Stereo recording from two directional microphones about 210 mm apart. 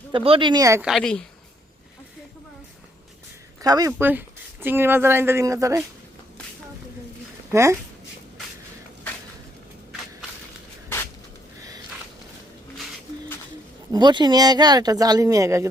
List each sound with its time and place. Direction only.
0.1 s speech: 25° right (ahead or behind)
0.8 s a woman's voice: centre (ahead or behind)
3.6 s speech: 15° right (ahead or behind)
7.5 s speech: 15° right (ahead or behind)
13.9 s speech: 20° right (ahead or behind)